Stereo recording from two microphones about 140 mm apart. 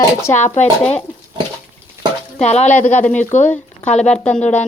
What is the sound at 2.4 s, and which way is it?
Speech, 50° left (ahead or behind).